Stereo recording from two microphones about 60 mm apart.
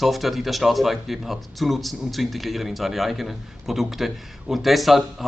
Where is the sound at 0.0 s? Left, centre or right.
Centre.